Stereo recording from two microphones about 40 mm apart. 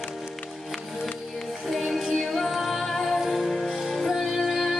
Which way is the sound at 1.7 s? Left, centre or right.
Centre.